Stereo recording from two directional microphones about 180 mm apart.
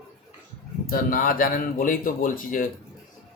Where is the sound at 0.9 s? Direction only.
50° left (ahead or behind).